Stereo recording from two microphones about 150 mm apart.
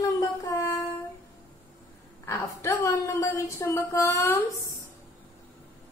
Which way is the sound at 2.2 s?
20° left (ahead or behind).